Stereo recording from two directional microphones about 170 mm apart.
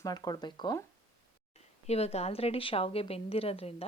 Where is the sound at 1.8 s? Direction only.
40° left (ahead or behind).